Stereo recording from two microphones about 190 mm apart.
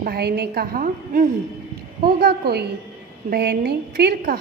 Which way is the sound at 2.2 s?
55° right (ahead or behind).